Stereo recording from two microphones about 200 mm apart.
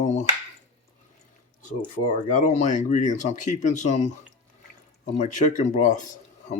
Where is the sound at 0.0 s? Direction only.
35° left (ahead or behind).